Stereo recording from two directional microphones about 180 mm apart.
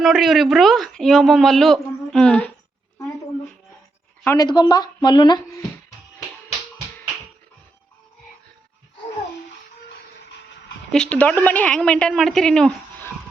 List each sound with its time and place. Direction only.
0.0 s speech: centre (ahead or behind)
4.4 s speech: 25° left (ahead or behind)
10.9 s speech: 5° left (ahead or behind)